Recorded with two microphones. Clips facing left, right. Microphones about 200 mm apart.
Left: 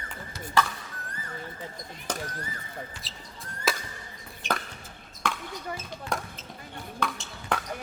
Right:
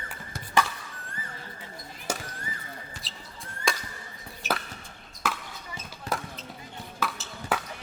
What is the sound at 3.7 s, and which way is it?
Fireworks, 5° left (ahead or behind).